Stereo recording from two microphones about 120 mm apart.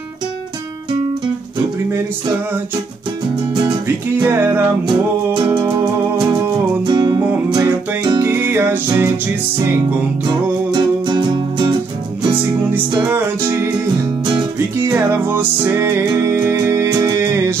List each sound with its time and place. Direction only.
3.8 s music: 20° right (ahead or behind)
5.8 s music: 30° right (ahead or behind)
8.3 s music: 20° right (ahead or behind)
10.7 s music: 40° right (ahead or behind)
13.0 s music: 20° right (ahead or behind)
14.8 s music: 20° right (ahead or behind)